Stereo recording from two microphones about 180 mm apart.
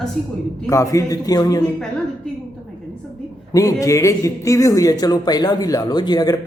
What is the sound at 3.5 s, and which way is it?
Speech, 20° left (ahead or behind).